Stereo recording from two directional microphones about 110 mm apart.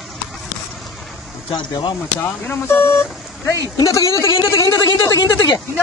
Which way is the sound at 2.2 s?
20° left (ahead or behind).